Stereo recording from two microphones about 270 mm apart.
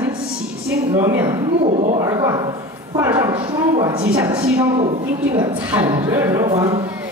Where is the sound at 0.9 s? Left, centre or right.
Centre.